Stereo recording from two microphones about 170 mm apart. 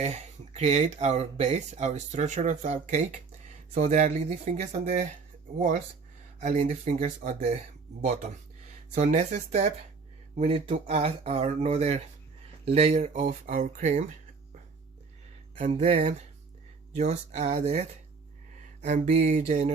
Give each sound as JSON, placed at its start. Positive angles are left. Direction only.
{"t": 0.0, "sound": "speech", "side_deg": -40}
{"t": 9.0, "sound": "speech", "side_deg": -40}
{"t": 15.5, "sound": "speech", "side_deg": -45}